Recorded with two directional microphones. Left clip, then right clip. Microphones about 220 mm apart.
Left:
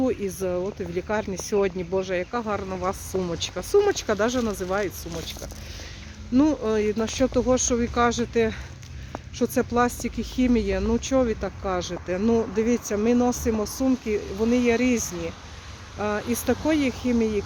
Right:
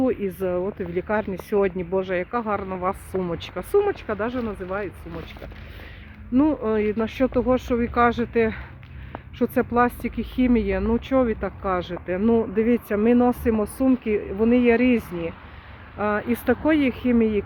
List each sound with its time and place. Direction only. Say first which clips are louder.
0.0 s speech: right 2 dB; 10° right (ahead or behind)
4.0 s speech: left 3 dB; 25° left (ahead or behind)
6.3 s speech: right 1 dB; 5° right (ahead or behind)
16.0 s speech: right 3 dB; 10° right (ahead or behind)